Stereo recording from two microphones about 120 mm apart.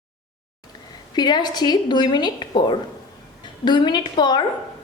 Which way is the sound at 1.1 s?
35° left (ahead or behind).